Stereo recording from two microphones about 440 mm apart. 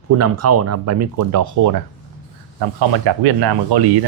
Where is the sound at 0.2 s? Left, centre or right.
Right.